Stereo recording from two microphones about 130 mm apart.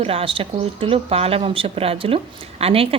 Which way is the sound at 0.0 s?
45° right (ahead or behind).